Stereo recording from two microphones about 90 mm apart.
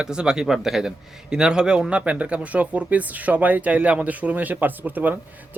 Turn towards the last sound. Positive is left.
turn(degrees=-20)  # may be behind; listen again after turning